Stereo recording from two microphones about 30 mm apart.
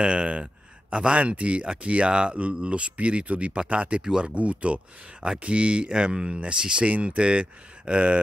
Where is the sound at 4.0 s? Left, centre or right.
Right.